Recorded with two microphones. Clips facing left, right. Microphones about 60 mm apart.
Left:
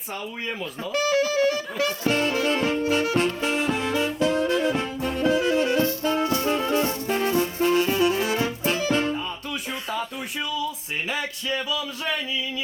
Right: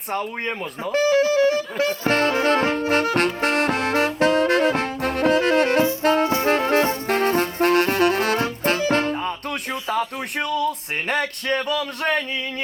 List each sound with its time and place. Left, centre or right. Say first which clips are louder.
0.1 s speech: right 6 dB; right
0.9 s music: right 4 dB; right
2.0 s saxophone: right 4 dB; right
6.0 s music: right 6 dB; right
6.2 s music: right 3 dB; right
6.5 s music: right 6 dB; right
7.1 s saxophone: right 3 dB; right
9.1 s a sound: right 4 dB; right